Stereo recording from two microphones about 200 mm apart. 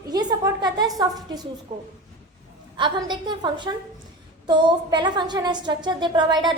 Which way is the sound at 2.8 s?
20° right (ahead or behind).